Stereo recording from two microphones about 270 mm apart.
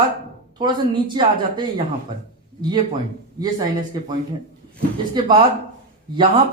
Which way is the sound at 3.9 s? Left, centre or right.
Centre.